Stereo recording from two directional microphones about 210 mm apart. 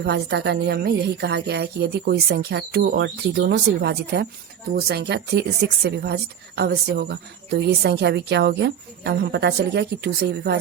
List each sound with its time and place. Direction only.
0.0 s a woman's voice: 50° right (ahead or behind)